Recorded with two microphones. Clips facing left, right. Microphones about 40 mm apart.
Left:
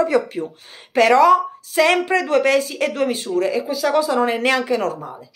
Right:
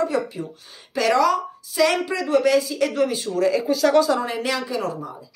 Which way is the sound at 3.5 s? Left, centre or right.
Centre.